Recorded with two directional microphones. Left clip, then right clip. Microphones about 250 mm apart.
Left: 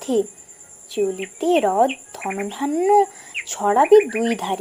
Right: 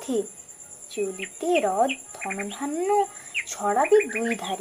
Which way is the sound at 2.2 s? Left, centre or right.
Centre.